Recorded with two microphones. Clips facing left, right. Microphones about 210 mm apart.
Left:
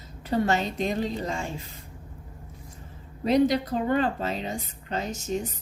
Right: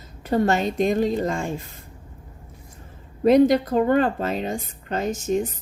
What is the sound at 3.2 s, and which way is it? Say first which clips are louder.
A woman's voice: right 6 dB; 50° right (ahead or behind).